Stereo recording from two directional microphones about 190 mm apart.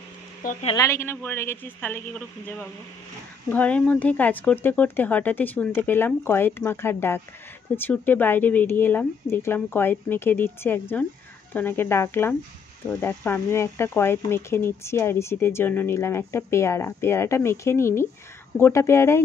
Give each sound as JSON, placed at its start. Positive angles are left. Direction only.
{"t": 0.4, "sound": "speech", "side_deg": 45}
{"t": 0.7, "sound": "speech", "side_deg": 15}